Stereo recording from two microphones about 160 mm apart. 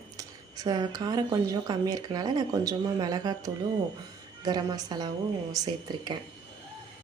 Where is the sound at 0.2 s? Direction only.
20° right (ahead or behind).